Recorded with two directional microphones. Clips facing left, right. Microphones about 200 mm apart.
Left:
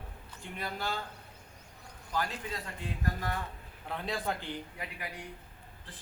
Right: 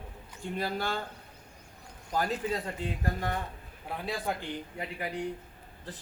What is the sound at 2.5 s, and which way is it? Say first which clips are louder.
Speech: right 7 dB; 30° right (ahead or behind).